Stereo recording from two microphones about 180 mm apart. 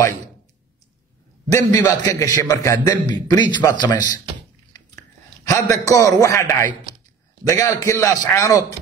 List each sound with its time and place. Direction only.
1.5 s a man's voice: 20° left (ahead or behind)
5.5 s a man's voice: 15° left (ahead or behind)
7.4 s a man's voice: 20° left (ahead or behind)